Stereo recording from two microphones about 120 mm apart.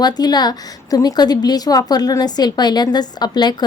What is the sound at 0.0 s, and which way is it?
A woman's voice, 35° left (ahead or behind).